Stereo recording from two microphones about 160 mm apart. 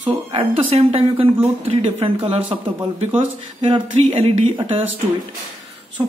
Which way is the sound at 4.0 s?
40° right (ahead or behind).